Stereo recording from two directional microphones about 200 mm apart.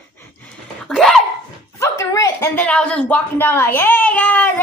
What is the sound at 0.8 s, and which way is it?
Speech, centre (ahead or behind).